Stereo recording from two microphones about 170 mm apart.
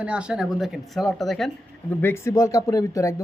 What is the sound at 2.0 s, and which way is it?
Speech, 15° left (ahead or behind).